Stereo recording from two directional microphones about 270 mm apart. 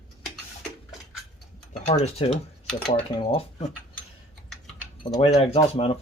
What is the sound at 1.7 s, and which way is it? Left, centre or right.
Speech, left.